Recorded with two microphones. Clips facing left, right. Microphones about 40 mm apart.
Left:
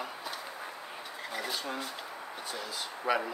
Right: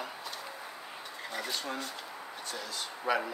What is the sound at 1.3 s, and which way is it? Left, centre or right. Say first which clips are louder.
Speech: even; centre.